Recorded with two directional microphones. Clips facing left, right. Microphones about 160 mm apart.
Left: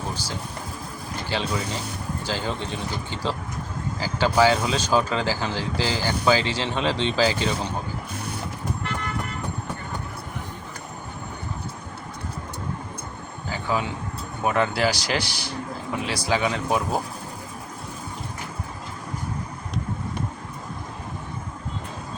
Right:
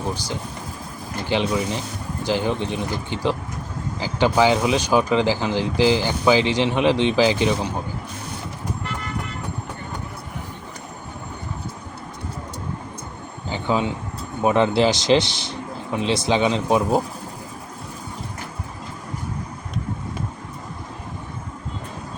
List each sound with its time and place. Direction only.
1.3 s speech: 15° right (ahead or behind)
13.5 s a sound: 25° right (ahead or behind)
14.4 s speech: 25° right (ahead or behind)